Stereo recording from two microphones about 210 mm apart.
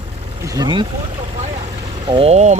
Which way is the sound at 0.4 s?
20° right (ahead or behind).